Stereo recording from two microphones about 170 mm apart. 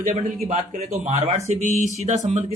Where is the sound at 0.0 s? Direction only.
45° right (ahead or behind).